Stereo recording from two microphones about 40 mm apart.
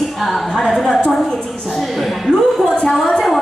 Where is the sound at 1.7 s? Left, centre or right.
Centre.